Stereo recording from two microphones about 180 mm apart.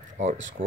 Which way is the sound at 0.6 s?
50° right (ahead or behind).